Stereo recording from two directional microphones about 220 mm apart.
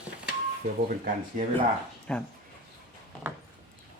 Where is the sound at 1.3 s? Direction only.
35° right (ahead or behind).